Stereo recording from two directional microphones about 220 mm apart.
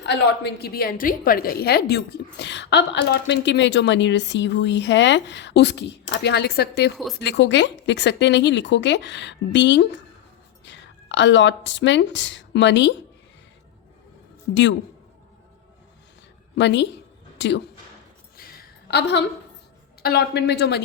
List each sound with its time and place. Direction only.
0.0 s a woman's voice: 50° left (ahead or behind)
14.5 s a man's voice: 55° left (ahead or behind)
16.6 s a woman's voice: 55° left (ahead or behind)
18.3 s a sound: 45° left (ahead or behind)
20.0 s a woman's voice: 45° left (ahead or behind)